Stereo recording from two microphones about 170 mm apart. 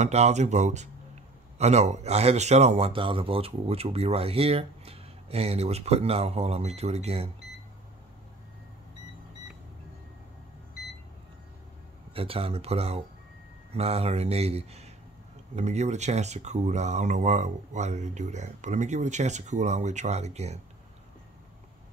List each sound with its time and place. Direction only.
0.0 s a man's voice: 40° right (ahead or behind)
12.1 s a man's voice: 35° right (ahead or behind)